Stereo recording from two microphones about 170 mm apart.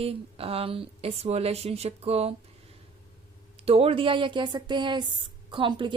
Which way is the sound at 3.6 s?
35° right (ahead or behind).